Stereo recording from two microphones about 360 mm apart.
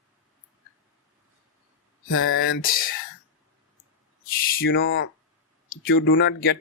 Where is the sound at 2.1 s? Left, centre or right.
Left.